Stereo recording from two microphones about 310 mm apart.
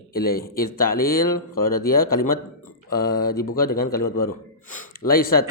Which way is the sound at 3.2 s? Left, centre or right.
Left.